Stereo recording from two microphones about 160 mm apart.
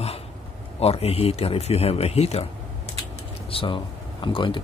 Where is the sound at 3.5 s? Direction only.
35° left (ahead or behind).